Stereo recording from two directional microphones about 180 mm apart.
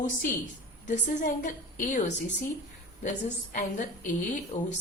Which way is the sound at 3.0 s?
45° left (ahead or behind).